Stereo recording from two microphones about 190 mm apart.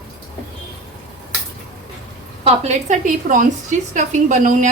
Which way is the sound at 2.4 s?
40° right (ahead or behind).